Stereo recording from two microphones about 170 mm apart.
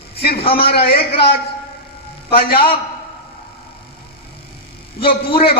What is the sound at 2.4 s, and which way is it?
Speech, 60° left (ahead or behind).